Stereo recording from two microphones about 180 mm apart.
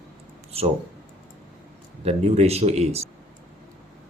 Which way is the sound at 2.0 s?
35° right (ahead or behind).